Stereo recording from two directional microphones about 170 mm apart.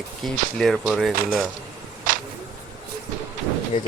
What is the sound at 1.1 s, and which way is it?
Speech, 60° right (ahead or behind).